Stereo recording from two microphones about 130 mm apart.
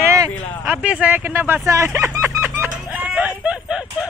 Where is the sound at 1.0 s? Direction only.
15° right (ahead or behind).